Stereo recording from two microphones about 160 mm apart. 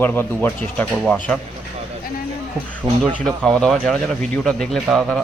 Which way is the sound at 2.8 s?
Centre (ahead or behind).